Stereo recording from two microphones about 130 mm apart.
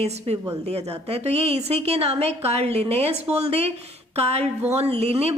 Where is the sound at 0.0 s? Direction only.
55° right (ahead or behind).